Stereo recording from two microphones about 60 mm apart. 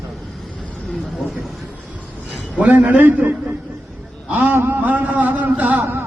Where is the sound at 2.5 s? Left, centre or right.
Right.